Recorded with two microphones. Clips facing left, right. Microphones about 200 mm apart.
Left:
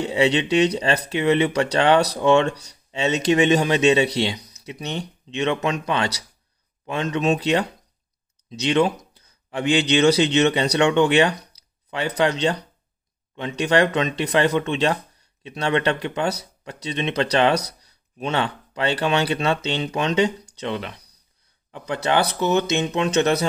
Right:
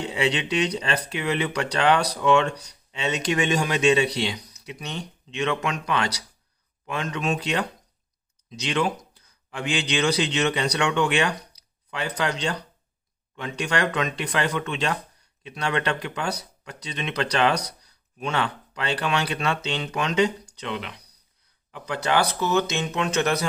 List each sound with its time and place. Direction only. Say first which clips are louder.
0.1 s speech: left 6 dB; 25° left (ahead or behind)